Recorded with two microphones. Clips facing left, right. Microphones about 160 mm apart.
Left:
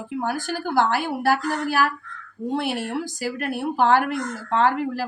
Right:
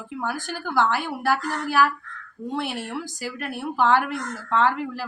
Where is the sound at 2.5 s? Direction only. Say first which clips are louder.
Left 3 dB; 40° left (ahead or behind).